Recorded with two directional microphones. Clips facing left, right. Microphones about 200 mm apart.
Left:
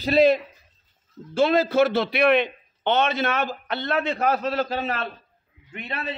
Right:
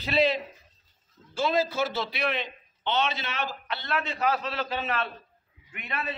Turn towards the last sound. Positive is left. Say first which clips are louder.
# left 3 dB
turn(degrees=30)  # may be behind; listen again after turning